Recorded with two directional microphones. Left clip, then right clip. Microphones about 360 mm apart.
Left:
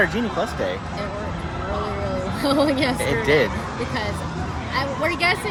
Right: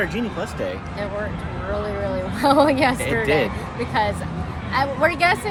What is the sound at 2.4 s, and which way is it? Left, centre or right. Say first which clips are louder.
Speech: right 4 dB; centre.